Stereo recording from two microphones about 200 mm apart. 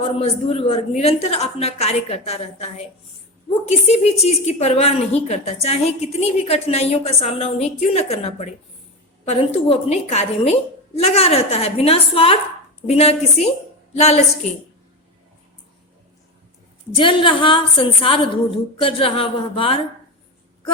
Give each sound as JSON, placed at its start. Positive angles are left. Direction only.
{"t": 0.0, "sound": "a woman's voice", "side_deg": 30}
{"t": 16.9, "sound": "a woman's voice", "side_deg": 25}